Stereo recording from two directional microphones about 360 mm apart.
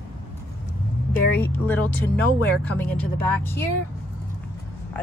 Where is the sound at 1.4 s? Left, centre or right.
Centre.